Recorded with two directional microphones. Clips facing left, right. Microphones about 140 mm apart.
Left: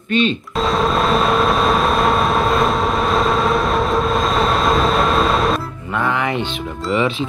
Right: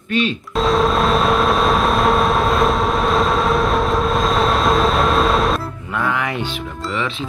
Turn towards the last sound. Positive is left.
turn(degrees=5)  # may be behind; listen again after turning